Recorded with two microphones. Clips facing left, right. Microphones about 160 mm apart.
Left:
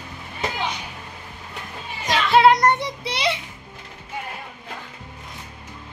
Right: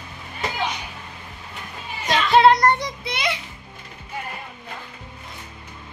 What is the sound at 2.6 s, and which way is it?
Child singing, 20° left (ahead or behind).